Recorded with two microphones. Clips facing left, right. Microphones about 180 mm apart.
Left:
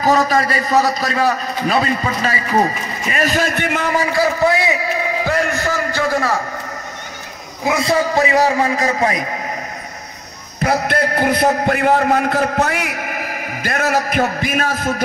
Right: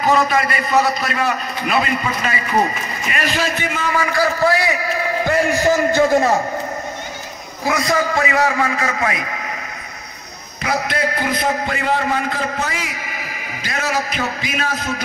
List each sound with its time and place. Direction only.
0.0 s a man's voice: 35° left (ahead or behind); by 3.9 s 55° left (ahead or behind)
3.9 s a man's voice: 30° left (ahead or behind)
5.5 s a man's voice: 20° right (ahead or behind)
7.6 s a man's voice: 25° left (ahead or behind)
10.6 s a man's voice: 55° left (ahead or behind)